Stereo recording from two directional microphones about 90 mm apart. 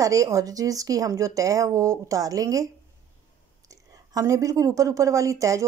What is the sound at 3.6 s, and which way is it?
A woman's voice, 40° right (ahead or behind).